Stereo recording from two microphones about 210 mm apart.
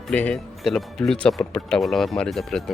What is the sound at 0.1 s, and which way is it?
Speech, 5° left (ahead or behind).